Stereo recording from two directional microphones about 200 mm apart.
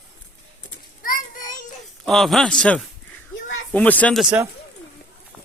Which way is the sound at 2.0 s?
Centre (ahead or behind).